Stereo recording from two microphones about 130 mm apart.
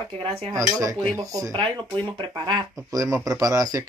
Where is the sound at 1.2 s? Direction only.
25° right (ahead or behind).